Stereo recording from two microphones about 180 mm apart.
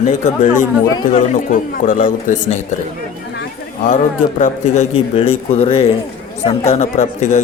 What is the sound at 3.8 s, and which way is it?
Speech, 45° left (ahead or behind).